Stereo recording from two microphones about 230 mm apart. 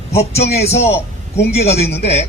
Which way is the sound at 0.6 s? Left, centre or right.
Left.